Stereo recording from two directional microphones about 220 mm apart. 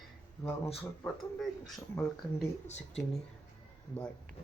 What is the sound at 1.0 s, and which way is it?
Speech, centre (ahead or behind).